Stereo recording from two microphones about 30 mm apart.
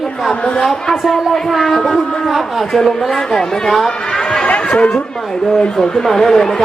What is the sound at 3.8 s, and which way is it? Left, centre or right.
Chatter, left.